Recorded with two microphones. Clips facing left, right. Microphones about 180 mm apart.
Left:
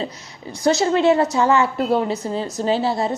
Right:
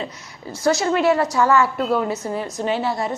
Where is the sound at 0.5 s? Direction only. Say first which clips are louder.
Left 2 dB; 20° left (ahead or behind).